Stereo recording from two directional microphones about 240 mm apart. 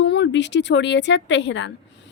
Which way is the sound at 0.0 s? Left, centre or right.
Left.